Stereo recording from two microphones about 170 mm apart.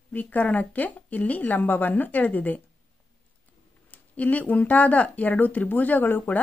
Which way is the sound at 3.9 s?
10° left (ahead or behind).